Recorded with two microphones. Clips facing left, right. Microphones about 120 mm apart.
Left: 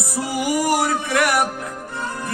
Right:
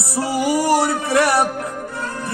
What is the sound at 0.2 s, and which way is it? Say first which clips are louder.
Music: right 3 dB; 30° right (ahead or behind).